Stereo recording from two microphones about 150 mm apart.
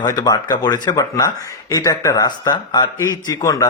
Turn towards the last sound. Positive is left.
turn(degrees=25)  # may be behind; listen again after turning